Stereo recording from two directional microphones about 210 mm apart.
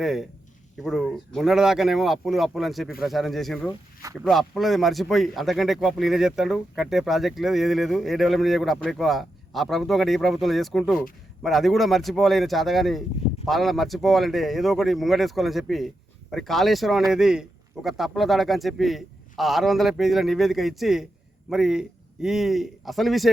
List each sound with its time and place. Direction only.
0.0 s speech: centre (ahead or behind)